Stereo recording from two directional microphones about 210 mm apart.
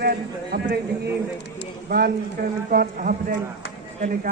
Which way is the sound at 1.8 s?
45° right (ahead or behind).